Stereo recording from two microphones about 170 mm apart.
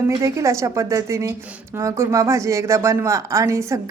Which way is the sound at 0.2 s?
20° right (ahead or behind).